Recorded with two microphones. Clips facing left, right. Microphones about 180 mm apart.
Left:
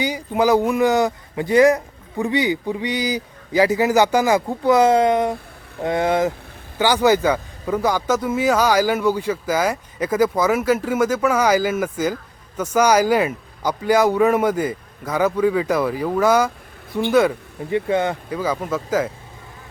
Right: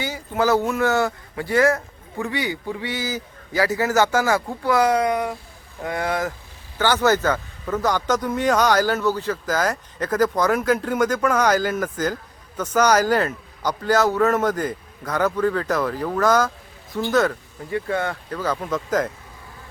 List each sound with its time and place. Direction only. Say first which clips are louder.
0.0 s speech: left 3 dB; 15° left (ahead or behind)